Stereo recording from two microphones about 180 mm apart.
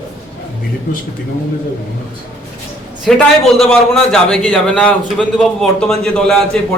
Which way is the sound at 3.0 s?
Centre (ahead or behind).